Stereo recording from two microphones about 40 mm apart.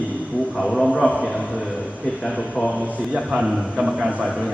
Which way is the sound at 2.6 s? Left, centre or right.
Right.